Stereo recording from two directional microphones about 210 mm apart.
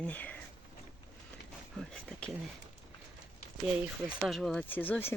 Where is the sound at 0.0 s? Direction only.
5° left (ahead or behind).